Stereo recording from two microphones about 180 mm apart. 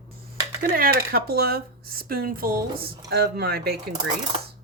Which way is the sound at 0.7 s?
55° right (ahead or behind).